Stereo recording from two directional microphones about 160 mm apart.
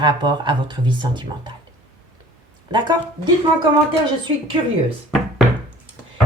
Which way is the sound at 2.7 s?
30° right (ahead or behind).